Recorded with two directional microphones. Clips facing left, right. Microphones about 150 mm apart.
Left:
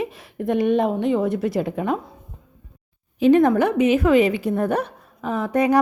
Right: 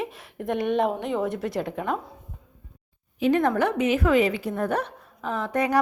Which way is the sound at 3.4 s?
15° left (ahead or behind).